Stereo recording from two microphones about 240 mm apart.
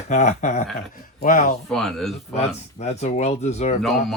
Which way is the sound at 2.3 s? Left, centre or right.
Left.